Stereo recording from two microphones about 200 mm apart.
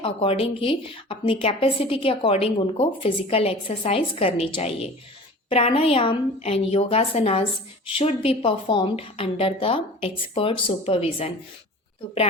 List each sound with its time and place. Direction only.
0.0 s a woman's voice: 25° left (ahead or behind)